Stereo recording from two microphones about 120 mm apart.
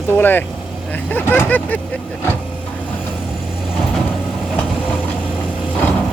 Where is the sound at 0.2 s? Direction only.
15° left (ahead or behind).